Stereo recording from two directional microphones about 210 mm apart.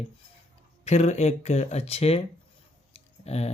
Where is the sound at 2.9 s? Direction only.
30° left (ahead or behind).